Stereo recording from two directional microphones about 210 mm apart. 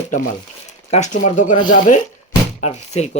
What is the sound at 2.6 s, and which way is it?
Speech, 30° left (ahead or behind).